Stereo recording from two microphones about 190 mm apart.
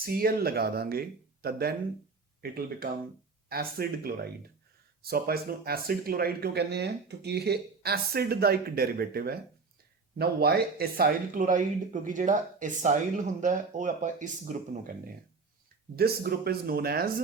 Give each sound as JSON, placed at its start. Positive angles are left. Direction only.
{"t": 0.0, "sound": "speech", "side_deg": -50}
{"t": 16.0, "sound": "speech", "side_deg": -55}